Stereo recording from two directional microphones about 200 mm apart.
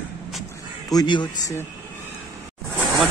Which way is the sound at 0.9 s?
20° left (ahead or behind).